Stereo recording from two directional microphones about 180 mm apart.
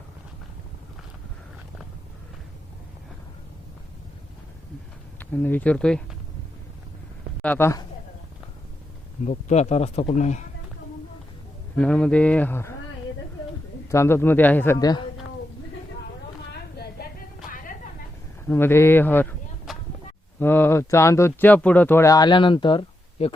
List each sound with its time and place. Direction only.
5.3 s speech: 10° left (ahead or behind)
7.4 s speech: 10° left (ahead or behind)
9.2 s a man's voice: 40° left (ahead or behind)
11.8 s speech: 5° left (ahead or behind)
13.9 s speech: 15° left (ahead or behind)
16.5 s a sound: 60° left (ahead or behind)
18.4 s speech: 10° left (ahead or behind)
19.7 s a sound: centre (ahead or behind)
20.4 s speech: 10° left (ahead or behind); by 23.3 s 30° left (ahead or behind)